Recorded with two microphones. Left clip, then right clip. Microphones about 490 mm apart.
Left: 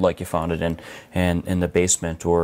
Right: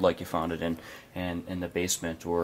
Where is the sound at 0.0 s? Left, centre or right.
Left.